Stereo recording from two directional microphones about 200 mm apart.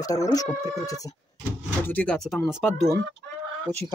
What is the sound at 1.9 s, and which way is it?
Speech, 5° left (ahead or behind).